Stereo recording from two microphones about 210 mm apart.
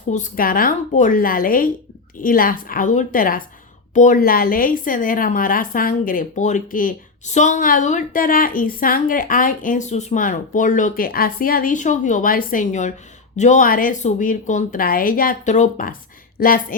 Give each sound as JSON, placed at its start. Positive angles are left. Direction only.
{"t": 0.1, "sound": "a woman's voice", "side_deg": 40}